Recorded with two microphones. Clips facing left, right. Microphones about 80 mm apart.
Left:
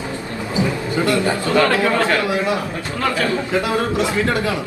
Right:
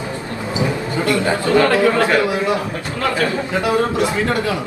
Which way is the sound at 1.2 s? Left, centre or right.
Right.